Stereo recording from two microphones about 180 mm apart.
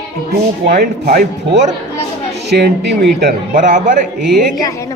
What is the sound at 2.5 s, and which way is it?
Speech, 70° right (ahead or behind).